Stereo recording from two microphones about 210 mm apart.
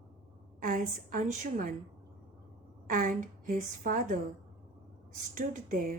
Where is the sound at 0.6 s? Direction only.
40° right (ahead or behind).